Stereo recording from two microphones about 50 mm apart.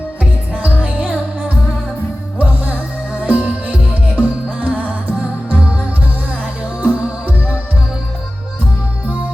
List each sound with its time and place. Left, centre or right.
0.2 s music: right
2.4 s music: right